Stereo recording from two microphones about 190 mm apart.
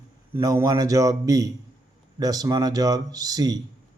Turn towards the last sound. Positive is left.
turn(degrees=-20)  # may be behind; listen again after turning